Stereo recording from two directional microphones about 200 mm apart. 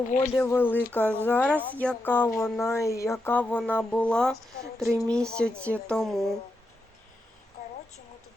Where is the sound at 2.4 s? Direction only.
10° left (ahead or behind).